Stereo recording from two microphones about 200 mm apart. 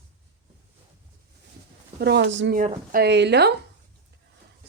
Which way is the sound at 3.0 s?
60° right (ahead or behind).